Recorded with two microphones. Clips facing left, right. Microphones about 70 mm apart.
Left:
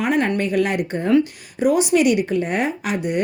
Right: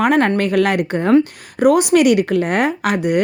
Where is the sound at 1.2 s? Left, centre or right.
Right.